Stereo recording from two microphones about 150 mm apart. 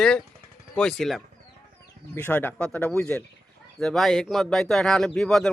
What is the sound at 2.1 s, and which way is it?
Speech, 15° left (ahead or behind).